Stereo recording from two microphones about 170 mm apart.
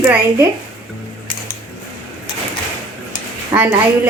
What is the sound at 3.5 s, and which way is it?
Speech, 10° right (ahead or behind).